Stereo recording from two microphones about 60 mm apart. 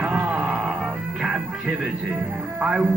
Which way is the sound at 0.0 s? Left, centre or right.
Centre.